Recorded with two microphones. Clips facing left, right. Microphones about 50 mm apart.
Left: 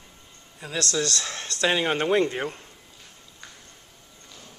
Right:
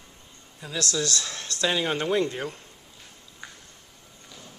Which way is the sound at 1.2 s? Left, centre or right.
Centre.